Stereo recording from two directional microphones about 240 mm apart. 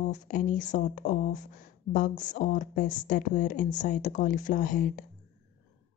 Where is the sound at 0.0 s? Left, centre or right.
Left.